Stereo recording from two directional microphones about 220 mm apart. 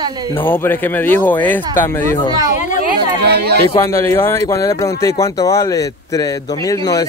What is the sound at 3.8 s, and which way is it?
Speech, 10° left (ahead or behind).